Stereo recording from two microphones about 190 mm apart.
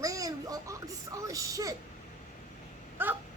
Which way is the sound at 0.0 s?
20° right (ahead or behind).